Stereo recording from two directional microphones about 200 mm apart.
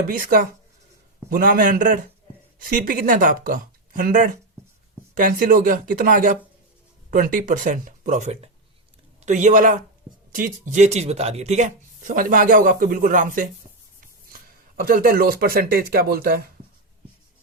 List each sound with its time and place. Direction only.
0.1 s speech: 45° right (ahead or behind)